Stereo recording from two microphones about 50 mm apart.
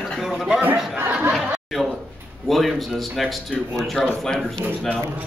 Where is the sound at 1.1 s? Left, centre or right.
Right.